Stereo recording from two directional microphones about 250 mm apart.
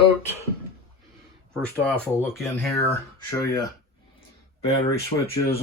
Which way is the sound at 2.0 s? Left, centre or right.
Centre.